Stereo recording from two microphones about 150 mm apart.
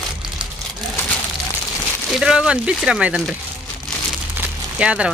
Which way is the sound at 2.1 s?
5° right (ahead or behind).